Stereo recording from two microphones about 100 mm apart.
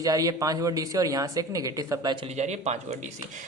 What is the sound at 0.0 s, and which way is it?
Speech, 40° right (ahead or behind).